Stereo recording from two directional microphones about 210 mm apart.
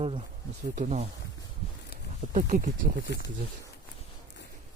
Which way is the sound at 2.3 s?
35° right (ahead or behind).